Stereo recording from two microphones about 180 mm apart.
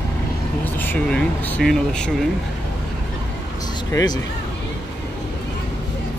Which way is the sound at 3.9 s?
20° left (ahead or behind).